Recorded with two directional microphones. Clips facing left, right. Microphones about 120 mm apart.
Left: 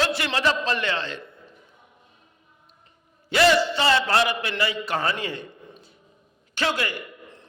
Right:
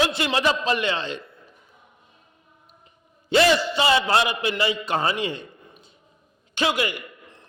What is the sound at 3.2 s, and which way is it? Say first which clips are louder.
A man's voice: even; 15° right (ahead or behind).